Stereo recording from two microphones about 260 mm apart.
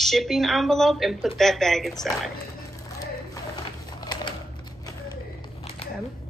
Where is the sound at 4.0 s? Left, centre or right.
Centre.